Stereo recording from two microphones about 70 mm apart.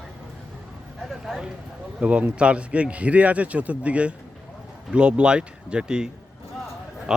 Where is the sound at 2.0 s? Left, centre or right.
Centre.